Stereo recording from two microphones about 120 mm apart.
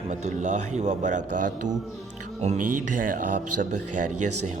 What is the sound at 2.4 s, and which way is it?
Speech, 70° right (ahead or behind).